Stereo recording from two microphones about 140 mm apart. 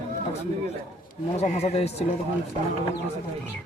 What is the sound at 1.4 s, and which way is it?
Speech, 50° left (ahead or behind).